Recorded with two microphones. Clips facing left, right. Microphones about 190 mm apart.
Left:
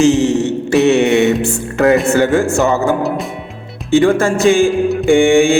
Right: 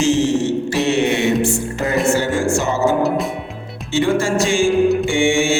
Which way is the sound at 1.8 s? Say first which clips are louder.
Left 7 dB; 65° left (ahead or behind).